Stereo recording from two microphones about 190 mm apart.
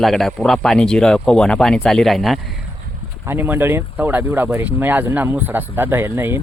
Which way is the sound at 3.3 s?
10° right (ahead or behind).